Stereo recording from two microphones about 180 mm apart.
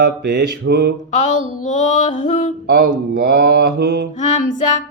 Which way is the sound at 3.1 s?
55° right (ahead or behind).